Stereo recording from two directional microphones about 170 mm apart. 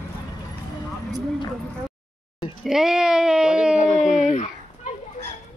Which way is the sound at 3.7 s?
45° left (ahead or behind).